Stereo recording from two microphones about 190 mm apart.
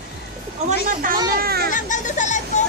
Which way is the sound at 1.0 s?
45° right (ahead or behind).